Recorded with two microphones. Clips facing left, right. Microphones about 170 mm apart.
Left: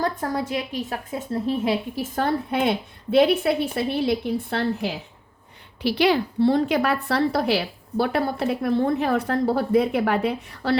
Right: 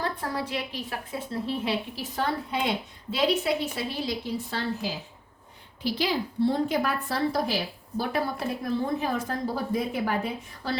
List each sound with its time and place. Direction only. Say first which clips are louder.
0.0 s a woman's voice: left 5 dB; 45° left (ahead or behind); by 10.8 s 70° left (ahead or behind)